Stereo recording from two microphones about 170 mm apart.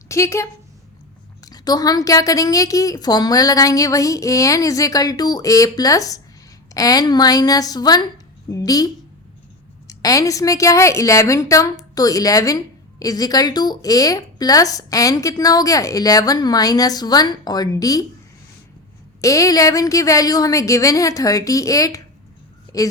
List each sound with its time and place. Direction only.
0.1 s speech: 15° left (ahead or behind)
1.5 s a woman's voice: 25° left (ahead or behind)
19.2 s a woman's voice: 20° left (ahead or behind)